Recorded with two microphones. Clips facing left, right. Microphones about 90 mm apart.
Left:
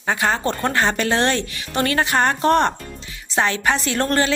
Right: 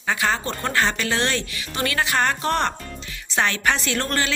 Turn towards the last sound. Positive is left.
turn(degrees=35)  # may be behind; listen again after turning